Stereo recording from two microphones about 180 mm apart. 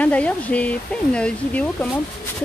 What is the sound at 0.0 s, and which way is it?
Speech, 5° left (ahead or behind).